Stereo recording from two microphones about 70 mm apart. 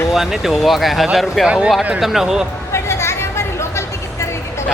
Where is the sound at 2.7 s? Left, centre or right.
Left.